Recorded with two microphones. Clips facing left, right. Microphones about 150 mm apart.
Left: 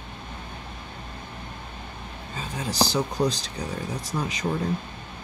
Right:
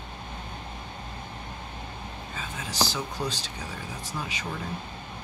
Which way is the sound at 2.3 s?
35° left (ahead or behind).